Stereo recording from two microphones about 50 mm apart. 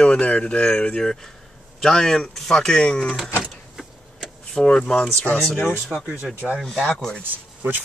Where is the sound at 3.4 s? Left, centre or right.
Centre.